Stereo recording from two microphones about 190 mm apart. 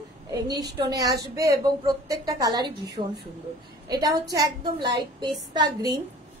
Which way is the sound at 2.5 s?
60° right (ahead or behind).